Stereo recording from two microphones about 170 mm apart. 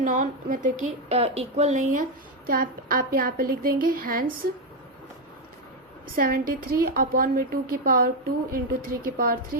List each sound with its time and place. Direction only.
0.0 s a woman's voice: 55° right (ahead or behind)
2.5 s a woman's voice: 60° right (ahead or behind)
6.1 s a woman's voice: 55° right (ahead or behind)